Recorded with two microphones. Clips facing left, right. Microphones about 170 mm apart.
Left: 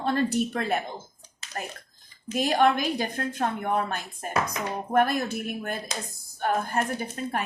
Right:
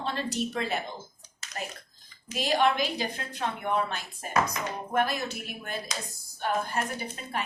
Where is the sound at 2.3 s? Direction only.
50° left (ahead or behind).